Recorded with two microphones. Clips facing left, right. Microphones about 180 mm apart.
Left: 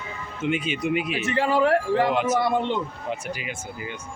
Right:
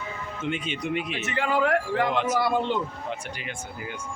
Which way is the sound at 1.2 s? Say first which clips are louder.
Left 3 dB; 30° left (ahead or behind).